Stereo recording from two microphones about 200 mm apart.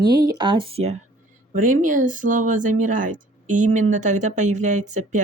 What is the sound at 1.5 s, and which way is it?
Speech, 40° right (ahead or behind).